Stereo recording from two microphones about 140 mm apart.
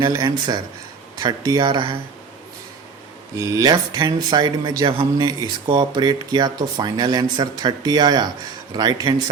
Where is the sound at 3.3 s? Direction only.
25° right (ahead or behind).